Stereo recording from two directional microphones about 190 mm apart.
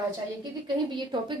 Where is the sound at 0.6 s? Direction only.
25° right (ahead or behind).